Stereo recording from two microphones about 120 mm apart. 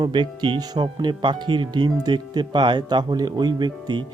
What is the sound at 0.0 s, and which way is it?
Speech, 40° right (ahead or behind).